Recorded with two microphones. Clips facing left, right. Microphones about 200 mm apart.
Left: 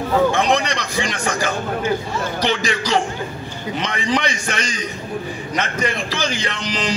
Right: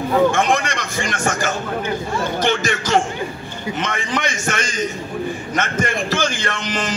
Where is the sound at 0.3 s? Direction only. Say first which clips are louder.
Even; 50° right (ahead or behind).